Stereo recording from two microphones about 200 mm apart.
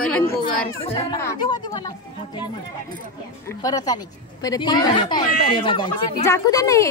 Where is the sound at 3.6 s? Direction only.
20° left (ahead or behind).